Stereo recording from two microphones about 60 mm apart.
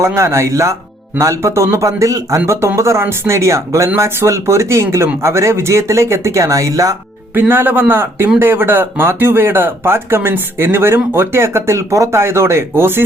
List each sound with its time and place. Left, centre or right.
0.0 s speech: right
2.5 s speech: right
7.3 s speech: right